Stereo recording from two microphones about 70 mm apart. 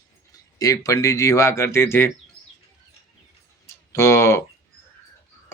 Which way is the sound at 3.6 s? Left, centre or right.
Left.